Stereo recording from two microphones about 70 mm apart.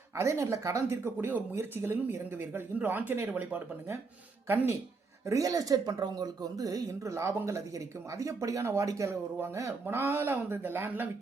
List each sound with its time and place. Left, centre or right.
0.2 s a woman's voice: right
5.2 s a woman's voice: right
9.8 s speech: right